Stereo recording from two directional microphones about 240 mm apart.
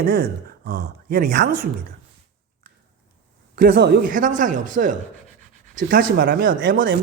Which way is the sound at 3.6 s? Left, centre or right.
Right.